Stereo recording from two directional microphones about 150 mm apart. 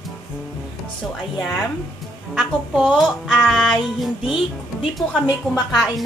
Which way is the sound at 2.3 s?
5° right (ahead or behind).